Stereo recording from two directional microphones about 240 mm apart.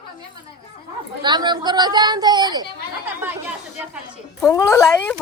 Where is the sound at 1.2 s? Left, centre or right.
Centre.